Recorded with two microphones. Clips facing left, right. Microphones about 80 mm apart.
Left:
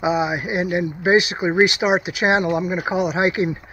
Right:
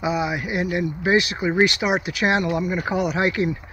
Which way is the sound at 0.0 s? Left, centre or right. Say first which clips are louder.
Left 3 dB; left.